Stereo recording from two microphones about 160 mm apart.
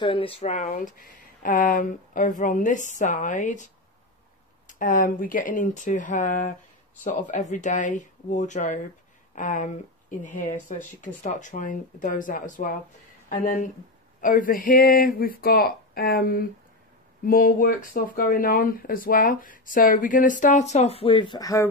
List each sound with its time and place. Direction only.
0.0 s speech: 35° left (ahead or behind); by 3.6 s 50° left (ahead or behind)
4.6 s speech: 55° left (ahead or behind); by 21.6 s 20° left (ahead or behind)